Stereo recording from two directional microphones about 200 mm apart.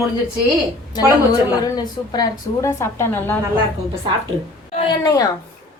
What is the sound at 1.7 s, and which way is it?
Speech, 20° left (ahead or behind).